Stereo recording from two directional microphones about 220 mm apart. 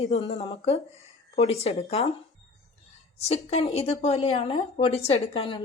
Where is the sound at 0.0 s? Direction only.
25° left (ahead or behind).